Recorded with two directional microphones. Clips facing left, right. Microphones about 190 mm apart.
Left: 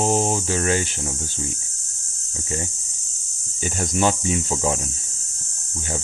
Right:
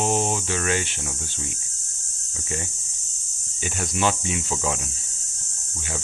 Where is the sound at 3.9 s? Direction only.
40° left (ahead or behind).